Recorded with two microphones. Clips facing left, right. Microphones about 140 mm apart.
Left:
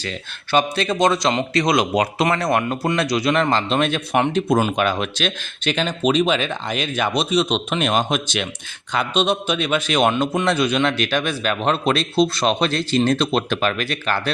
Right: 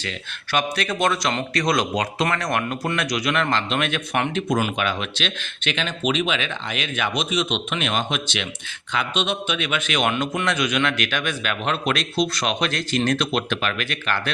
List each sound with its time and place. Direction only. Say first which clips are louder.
0.5 s a man's voice: left 5 dB; 25° left (ahead or behind)
4.8 s a man's voice: left 5 dB; 40° left (ahead or behind)